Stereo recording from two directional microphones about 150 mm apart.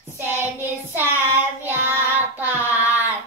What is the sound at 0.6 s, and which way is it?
Child singing, 15° right (ahead or behind).